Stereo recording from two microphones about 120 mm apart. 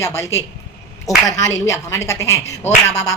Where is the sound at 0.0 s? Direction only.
25° left (ahead or behind).